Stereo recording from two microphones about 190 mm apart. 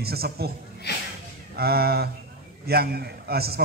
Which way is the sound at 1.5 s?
55° right (ahead or behind).